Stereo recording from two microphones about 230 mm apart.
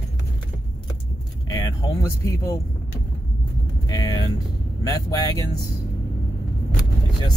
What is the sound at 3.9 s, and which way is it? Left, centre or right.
Speech, centre.